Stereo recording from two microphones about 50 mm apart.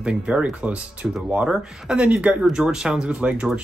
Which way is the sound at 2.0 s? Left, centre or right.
Right.